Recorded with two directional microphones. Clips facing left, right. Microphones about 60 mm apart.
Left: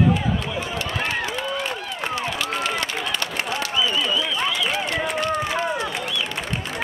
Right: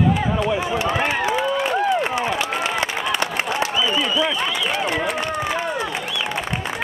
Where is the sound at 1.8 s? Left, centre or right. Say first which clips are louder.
Right 7 dB; right.